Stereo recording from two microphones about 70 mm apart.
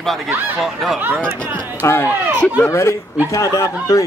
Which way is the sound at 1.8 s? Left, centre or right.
Left.